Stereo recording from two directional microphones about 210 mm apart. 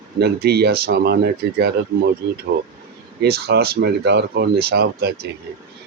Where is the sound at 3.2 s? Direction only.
50° right (ahead or behind).